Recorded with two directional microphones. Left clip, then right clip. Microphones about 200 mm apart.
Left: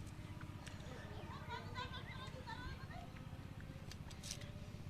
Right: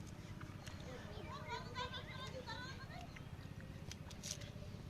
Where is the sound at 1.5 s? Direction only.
35° right (ahead or behind).